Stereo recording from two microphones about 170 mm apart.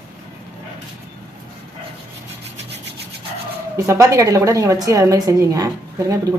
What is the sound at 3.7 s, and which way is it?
A woman's voice, 15° right (ahead or behind).